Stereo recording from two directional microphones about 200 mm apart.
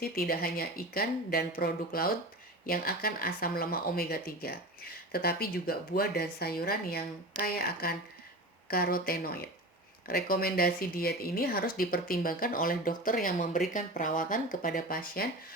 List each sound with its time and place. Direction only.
0.0 s speech: 50° left (ahead or behind)